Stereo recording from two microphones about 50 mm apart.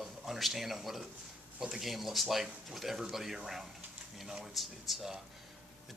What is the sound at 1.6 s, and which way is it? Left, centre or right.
Speech, centre.